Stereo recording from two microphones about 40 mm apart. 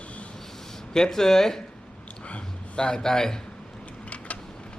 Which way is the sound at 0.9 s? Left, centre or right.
Centre.